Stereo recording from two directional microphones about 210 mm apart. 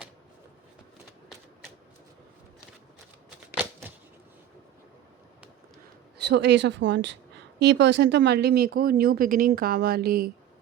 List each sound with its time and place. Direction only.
3.2 s shuffling cards: centre (ahead or behind)
6.2 s speech: 55° right (ahead or behind)